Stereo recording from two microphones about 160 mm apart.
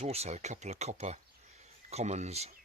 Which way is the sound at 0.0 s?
40° right (ahead or behind).